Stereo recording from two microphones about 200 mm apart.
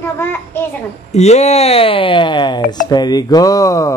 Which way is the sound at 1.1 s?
35° left (ahead or behind).